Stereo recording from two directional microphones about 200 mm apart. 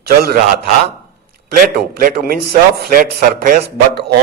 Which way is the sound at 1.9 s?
45° right (ahead or behind).